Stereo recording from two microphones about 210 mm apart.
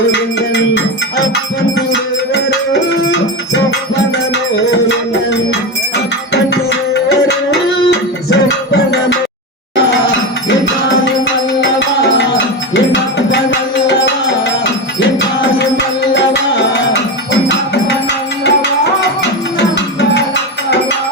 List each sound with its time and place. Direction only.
0.1 s music: 55° left (ahead or behind)
1.9 s music: 55° left (ahead or behind)
6.3 s tabla: 55° left (ahead or behind)
7.9 s music: 55° left (ahead or behind)
12.7 s music: 55° left (ahead or behind)
16.1 s music: 55° left (ahead or behind)